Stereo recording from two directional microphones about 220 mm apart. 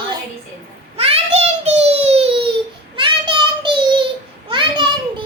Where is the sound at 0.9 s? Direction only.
25° right (ahead or behind).